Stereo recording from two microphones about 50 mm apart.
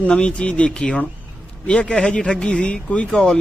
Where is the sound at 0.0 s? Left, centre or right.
Left.